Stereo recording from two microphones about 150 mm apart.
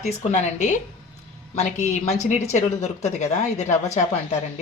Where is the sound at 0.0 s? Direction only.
50° left (ahead or behind).